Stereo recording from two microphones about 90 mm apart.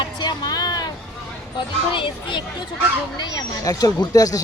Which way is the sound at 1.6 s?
65° left (ahead or behind).